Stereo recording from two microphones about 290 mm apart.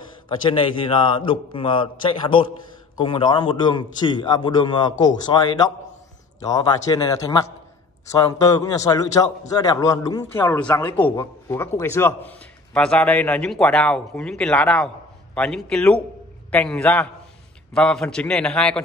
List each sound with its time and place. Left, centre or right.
0.5 s a man's voice: centre